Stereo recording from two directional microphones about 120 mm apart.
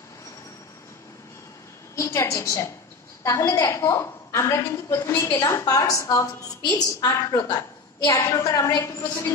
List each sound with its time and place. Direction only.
2.0 s a woman's voice: 25° left (ahead or behind)